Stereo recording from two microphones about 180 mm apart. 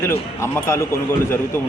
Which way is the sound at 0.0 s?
15° left (ahead or behind).